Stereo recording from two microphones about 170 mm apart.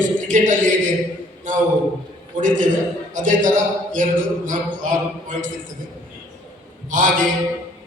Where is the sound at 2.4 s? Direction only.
50° right (ahead or behind).